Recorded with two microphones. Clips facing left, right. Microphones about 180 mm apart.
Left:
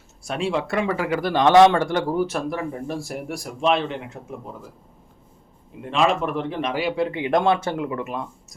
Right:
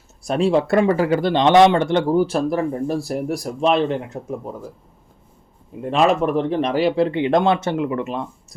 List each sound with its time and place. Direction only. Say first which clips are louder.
0.3 s speech: right 7 dB; 40° right (ahead or behind)
5.9 s speech: right 4 dB; 40° right (ahead or behind); by 8.5 s 25° right (ahead or behind)